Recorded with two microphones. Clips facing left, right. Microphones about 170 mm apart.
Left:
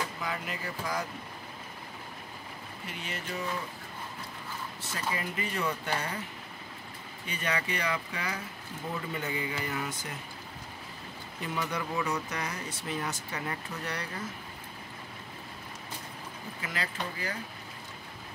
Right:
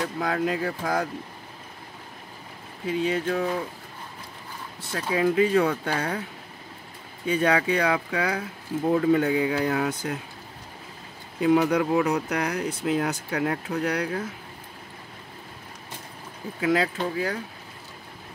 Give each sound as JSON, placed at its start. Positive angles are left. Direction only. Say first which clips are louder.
{"t": 0.2, "sound": "speech", "louder": "right 11 dB", "side_deg": -90}
{"t": 2.9, "sound": "speech", "louder": "right 15 dB", "side_deg": -90}
{"t": 4.9, "sound": "speech", "louder": "right 13 dB", "side_deg": -90}
{"t": 7.4, "sound": "speech", "louder": "right 9 dB", "side_deg": -90}
{"t": 11.3, "sound": "speech", "louder": "right 14 dB", "side_deg": -85}
{"t": 16.6, "sound": "speech", "louder": "right 14 dB", "side_deg": -80}